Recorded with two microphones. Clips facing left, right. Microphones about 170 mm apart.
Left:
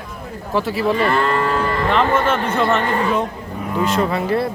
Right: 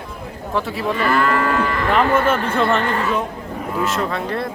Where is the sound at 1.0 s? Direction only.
30° left (ahead or behind).